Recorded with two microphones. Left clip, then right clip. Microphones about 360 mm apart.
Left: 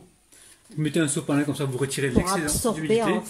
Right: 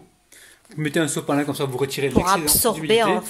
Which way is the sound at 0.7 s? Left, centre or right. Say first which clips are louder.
Right 3 dB; centre.